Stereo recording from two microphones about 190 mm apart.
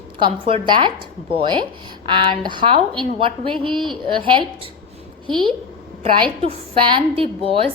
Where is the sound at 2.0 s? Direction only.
25° right (ahead or behind).